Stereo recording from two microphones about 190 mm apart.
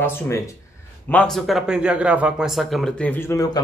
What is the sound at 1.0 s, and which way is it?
Speech, 5° left (ahead or behind).